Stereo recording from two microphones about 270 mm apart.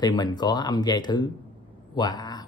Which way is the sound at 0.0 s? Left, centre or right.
Centre.